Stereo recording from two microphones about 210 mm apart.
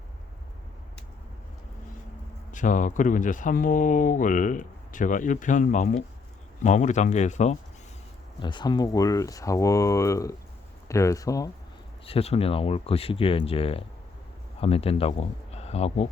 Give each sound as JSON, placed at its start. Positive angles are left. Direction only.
{"t": 2.5, "sound": "speech", "side_deg": 35}
{"t": 8.4, "sound": "speech", "side_deg": 20}
{"t": 12.0, "sound": "speech", "side_deg": 30}